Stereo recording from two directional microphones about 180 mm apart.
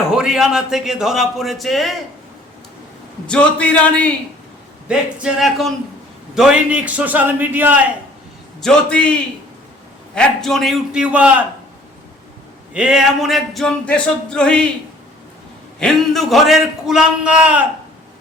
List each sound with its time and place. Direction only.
0.1 s speech: 5° right (ahead or behind)
3.2 s a man's voice: 5° left (ahead or behind)
4.9 s a man's voice: 5° right (ahead or behind)
8.6 s speech: 5° left (ahead or behind)
10.2 s speech: 5° left (ahead or behind)
12.7 s speech: 5° right (ahead or behind)
15.8 s speech: centre (ahead or behind)